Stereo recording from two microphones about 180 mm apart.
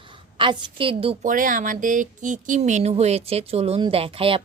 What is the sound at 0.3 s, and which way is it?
Speech, 30° right (ahead or behind).